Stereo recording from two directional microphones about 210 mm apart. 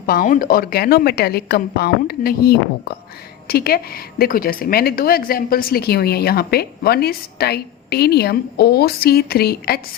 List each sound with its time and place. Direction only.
0.0 s speech: 45° left (ahead or behind)